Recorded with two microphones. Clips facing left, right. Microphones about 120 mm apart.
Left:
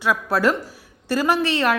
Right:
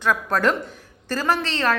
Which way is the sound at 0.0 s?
10° left (ahead or behind).